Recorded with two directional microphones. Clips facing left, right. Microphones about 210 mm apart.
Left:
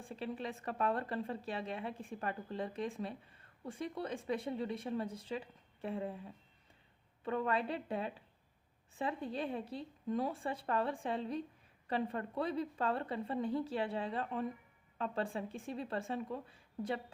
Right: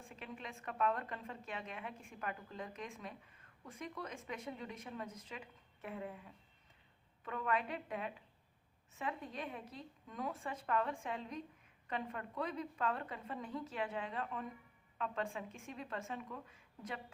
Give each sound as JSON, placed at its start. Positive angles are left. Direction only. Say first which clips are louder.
{"t": 0.0, "sound": "a woman's voice", "louder": "left 8 dB", "side_deg": 35}